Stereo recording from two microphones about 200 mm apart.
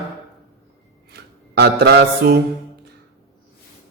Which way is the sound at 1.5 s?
55° right (ahead or behind).